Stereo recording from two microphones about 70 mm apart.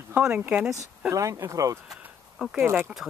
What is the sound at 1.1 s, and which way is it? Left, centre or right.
Speech, right.